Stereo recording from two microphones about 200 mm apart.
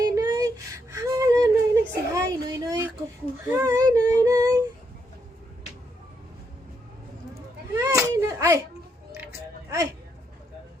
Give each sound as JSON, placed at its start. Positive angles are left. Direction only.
{"t": 0.0, "sound": "a sound", "side_deg": -20}
{"t": 3.6, "sound": "humming", "side_deg": -15}
{"t": 7.3, "sound": "children playing", "side_deg": -15}
{"t": 9.2, "sound": "music", "side_deg": -15}